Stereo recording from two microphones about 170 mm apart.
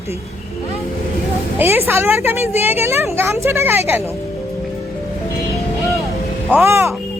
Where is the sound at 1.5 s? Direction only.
15° right (ahead or behind).